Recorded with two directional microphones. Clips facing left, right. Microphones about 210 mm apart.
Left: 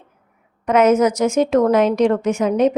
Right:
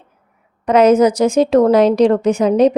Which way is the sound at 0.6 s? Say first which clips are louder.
Right 3 dB; 35° right (ahead or behind).